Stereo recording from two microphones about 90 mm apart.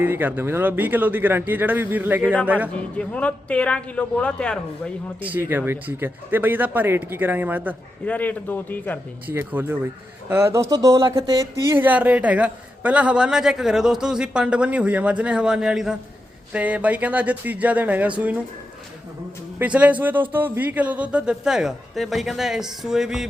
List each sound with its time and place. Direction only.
0.0 s speech: 20° right (ahead or behind)
2.7 s a man's voice: 15° left (ahead or behind)
5.2 s speech: 20° right (ahead or behind)
8.0 s a man's voice: 15° left (ahead or behind)
9.2 s a man's voice: 20° right (ahead or behind)
19.5 s a man's voice: 15° right (ahead or behind)